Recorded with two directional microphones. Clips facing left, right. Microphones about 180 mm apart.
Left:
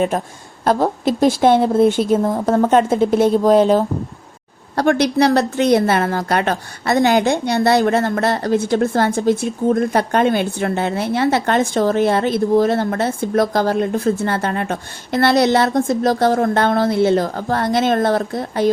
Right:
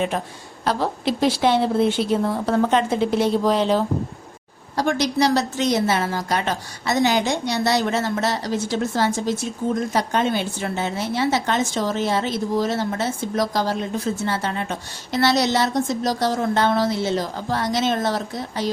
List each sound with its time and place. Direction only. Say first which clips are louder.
0.6 s speech: left 6 dB; 50° left (ahead or behind)
4.8 s a woman's voice: left 5 dB; 60° left (ahead or behind)